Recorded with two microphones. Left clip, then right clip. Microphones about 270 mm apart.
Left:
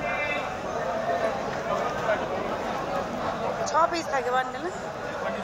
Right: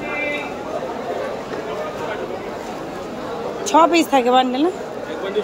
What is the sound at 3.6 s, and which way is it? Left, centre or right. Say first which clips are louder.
Speech: right 12 dB; right.